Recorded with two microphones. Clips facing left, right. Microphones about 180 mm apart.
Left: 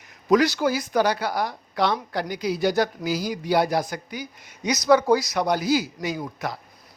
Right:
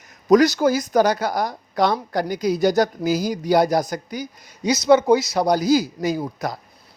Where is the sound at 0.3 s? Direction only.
45° right (ahead or behind).